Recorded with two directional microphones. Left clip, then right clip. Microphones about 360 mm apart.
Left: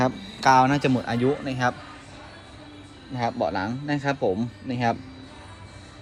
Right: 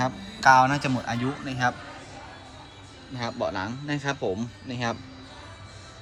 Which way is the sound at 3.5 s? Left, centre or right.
Centre.